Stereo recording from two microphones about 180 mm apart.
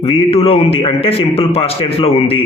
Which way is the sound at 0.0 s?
30° left (ahead or behind).